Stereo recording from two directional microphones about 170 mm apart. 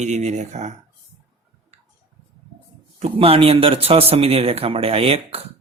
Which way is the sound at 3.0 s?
35° right (ahead or behind).